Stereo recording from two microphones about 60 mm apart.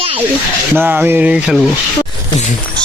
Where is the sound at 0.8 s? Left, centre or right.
Right.